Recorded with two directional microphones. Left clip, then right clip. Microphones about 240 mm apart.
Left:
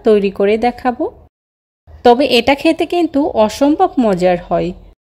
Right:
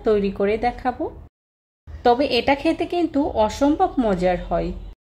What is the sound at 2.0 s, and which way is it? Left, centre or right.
A woman's voice, left.